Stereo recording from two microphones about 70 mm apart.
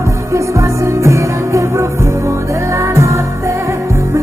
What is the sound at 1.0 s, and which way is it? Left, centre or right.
Music, right.